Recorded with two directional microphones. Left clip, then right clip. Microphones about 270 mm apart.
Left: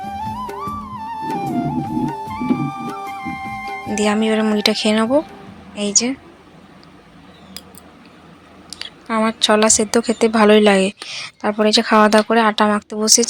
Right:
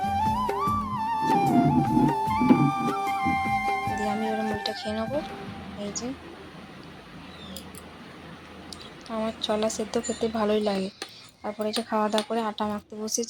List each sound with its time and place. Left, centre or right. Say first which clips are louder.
0.0 s music: right 1 dB; centre
4.3 s speech: left 11 dB; left
8.7 s speech: left 13 dB; left